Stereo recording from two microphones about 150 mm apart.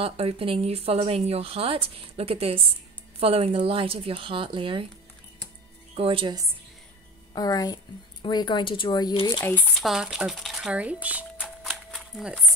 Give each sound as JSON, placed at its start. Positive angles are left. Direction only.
{"t": 0.0, "sound": "speech", "side_deg": -40}
{"t": 5.9, "sound": "speech", "side_deg": -35}
{"t": 7.3, "sound": "speech", "side_deg": 25}
{"t": 9.4, "sound": "speech", "side_deg": 10}